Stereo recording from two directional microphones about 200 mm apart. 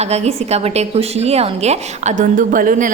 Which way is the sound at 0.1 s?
30° right (ahead or behind).